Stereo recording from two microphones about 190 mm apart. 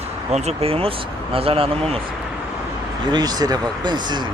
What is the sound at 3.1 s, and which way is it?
Speech, 20° right (ahead or behind).